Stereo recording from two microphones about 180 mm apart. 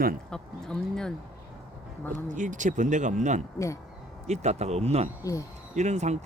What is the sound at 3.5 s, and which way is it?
Speech, 15° left (ahead or behind).